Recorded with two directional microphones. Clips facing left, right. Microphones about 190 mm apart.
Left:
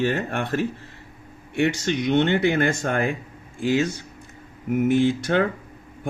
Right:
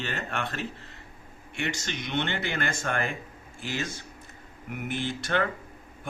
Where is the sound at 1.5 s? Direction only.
60° left (ahead or behind).